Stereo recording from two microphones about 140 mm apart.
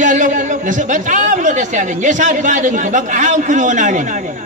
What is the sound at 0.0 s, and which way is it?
A man's voice, 65° right (ahead or behind).